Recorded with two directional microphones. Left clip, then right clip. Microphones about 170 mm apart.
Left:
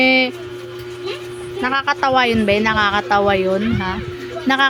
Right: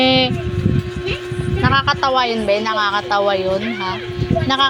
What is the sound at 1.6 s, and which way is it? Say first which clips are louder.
A woman's voice: right 1 dB; 20° left (ahead or behind).